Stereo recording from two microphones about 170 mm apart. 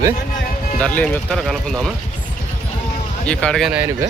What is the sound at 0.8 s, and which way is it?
Speech, 5° left (ahead or behind).